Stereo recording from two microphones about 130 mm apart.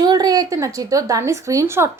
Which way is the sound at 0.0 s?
30° right (ahead or behind).